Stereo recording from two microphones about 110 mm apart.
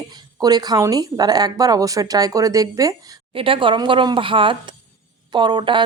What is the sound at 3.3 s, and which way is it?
A woman's voice, 55° right (ahead or behind).